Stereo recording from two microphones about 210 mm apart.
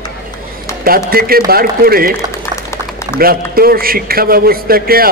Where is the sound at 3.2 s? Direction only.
45° right (ahead or behind).